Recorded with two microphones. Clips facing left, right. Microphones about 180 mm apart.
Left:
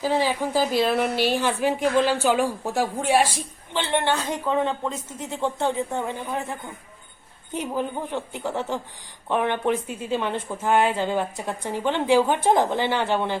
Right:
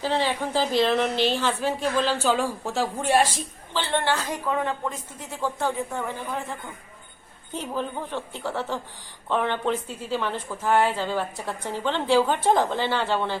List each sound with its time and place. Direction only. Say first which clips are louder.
0.0 s a woman's voice: left 2 dB; 10° left (ahead or behind)